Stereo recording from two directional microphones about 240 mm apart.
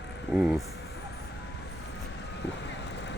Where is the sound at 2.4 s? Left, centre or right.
Left.